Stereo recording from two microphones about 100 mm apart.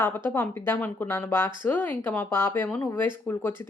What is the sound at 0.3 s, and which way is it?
Speech, 20° left (ahead or behind).